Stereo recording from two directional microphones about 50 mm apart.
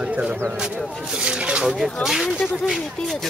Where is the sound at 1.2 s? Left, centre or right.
Right.